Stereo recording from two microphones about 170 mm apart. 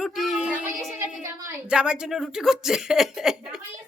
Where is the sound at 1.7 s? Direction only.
5° right (ahead or behind).